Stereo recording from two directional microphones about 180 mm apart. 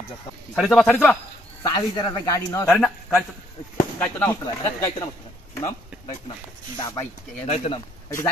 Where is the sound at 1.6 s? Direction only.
20° left (ahead or behind).